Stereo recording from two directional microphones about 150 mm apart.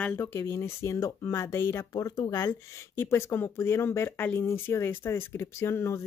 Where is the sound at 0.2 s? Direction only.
20° left (ahead or behind).